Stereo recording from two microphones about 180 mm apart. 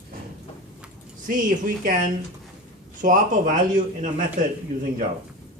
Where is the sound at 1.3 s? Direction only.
50° right (ahead or behind).